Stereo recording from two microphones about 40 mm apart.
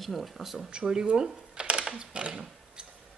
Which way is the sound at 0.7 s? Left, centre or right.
Centre.